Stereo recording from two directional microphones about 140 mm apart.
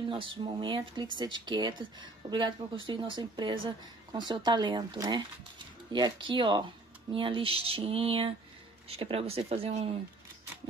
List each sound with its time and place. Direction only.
0.1 s speech: 40° right (ahead or behind)